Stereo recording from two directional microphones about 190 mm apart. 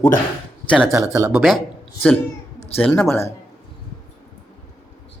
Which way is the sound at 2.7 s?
10° left (ahead or behind).